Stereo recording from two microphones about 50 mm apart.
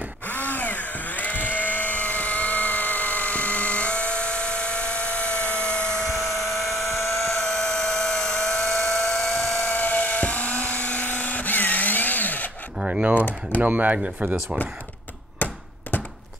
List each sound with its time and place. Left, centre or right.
0.3 s a sound: left; by 6.0 s centre
6.0 s helicopter: centre
7.1 s a sound: centre
9.7 s helicopter: left
13.6 s speech: right
13.9 s speech: right
15.3 s hammer: left